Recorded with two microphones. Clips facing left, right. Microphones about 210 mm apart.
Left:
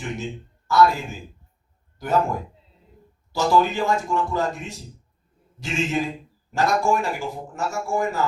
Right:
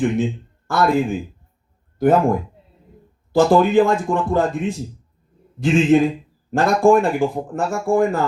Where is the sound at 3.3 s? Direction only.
55° right (ahead or behind).